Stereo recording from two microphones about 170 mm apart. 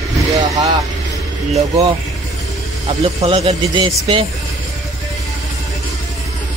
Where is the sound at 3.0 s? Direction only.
35° right (ahead or behind).